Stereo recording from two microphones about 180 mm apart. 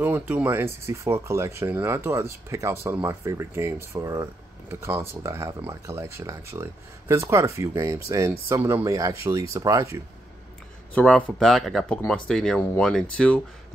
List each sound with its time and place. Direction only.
0.0 s speech: 10° right (ahead or behind)
11.0 s speech: 5° left (ahead or behind)